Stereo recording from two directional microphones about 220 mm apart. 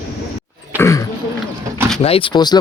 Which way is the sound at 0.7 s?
15° left (ahead or behind).